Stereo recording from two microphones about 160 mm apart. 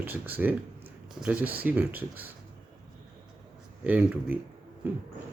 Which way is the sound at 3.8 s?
10° right (ahead or behind).